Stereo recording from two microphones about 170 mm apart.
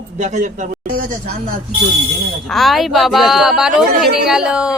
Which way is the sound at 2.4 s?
Centre (ahead or behind).